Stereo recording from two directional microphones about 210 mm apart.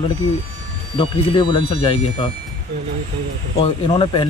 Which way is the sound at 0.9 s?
25° left (ahead or behind).